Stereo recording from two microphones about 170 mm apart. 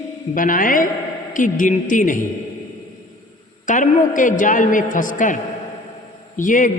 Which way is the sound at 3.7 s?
50° left (ahead or behind).